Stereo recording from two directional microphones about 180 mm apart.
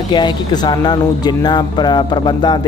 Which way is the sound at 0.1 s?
25° left (ahead or behind).